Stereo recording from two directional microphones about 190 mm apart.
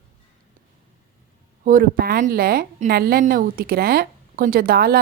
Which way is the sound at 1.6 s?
50° right (ahead or behind).